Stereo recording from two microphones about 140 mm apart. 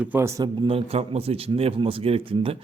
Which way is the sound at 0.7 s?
45° right (ahead or behind).